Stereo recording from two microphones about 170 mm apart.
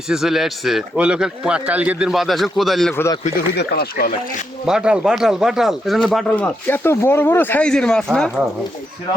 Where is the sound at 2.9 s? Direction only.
15° left (ahead or behind).